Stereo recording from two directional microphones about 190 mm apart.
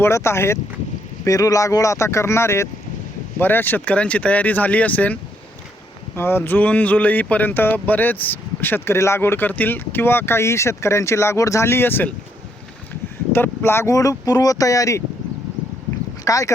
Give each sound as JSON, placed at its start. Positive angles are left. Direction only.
{"t": 0.0, "sound": "speech", "side_deg": 15}
{"t": 6.1, "sound": "speech", "side_deg": 10}
{"t": 13.3, "sound": "speech", "side_deg": 10}
{"t": 16.2, "sound": "speech", "side_deg": 20}